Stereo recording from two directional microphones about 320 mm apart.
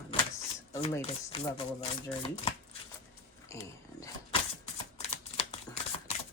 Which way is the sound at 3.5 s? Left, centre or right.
Centre.